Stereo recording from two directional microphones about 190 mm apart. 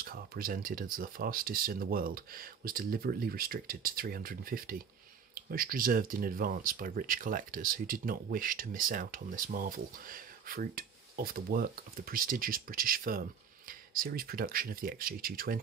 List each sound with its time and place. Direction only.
0.0 s speech: 50° right (ahead or behind)